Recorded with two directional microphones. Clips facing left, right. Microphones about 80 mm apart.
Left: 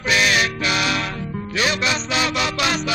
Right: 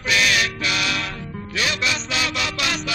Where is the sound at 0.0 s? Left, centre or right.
Left.